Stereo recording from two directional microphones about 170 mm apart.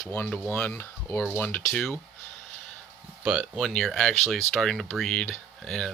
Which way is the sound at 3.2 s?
5° right (ahead or behind).